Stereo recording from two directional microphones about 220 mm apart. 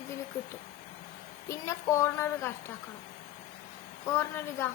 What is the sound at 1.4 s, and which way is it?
A woman's voice, 15° left (ahead or behind).